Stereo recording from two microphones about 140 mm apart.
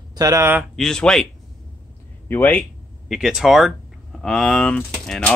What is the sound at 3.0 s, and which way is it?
Speech, centre (ahead or behind).